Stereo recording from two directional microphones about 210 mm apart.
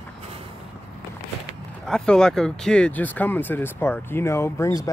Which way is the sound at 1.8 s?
5° left (ahead or behind).